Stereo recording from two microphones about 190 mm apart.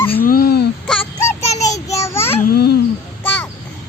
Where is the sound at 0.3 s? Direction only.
50° left (ahead or behind).